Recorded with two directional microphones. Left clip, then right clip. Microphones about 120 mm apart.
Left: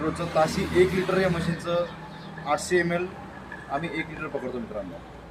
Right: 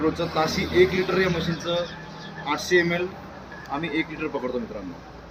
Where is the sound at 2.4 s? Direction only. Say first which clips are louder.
Right 2 dB; 35° left (ahead or behind).